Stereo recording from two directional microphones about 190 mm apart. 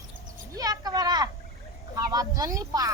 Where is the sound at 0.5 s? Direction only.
20° right (ahead or behind).